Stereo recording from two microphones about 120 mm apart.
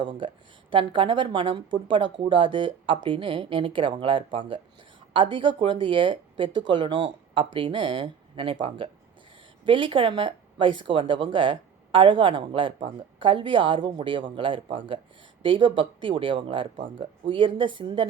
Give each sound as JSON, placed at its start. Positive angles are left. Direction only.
{"t": 0.0, "sound": "speech", "side_deg": -45}